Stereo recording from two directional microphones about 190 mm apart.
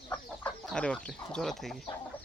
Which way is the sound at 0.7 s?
5° left (ahead or behind).